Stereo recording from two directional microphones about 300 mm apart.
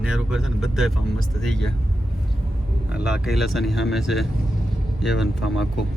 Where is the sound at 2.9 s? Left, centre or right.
Centre.